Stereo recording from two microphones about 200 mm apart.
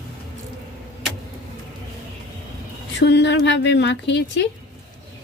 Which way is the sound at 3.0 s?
60° left (ahead or behind).